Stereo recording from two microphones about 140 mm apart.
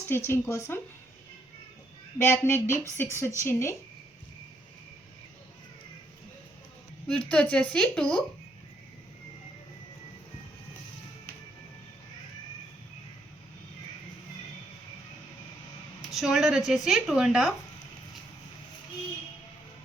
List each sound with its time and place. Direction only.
0.1 s speech: 15° left (ahead or behind)
2.2 s speech: 20° left (ahead or behind)
7.1 s speech: 10° left (ahead or behind)
16.0 s speech: centre (ahead or behind)